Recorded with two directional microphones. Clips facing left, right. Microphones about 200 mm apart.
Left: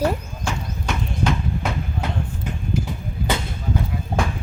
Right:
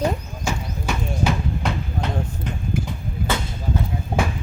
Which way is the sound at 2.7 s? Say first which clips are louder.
Left 1 dB; 55° right (ahead or behind).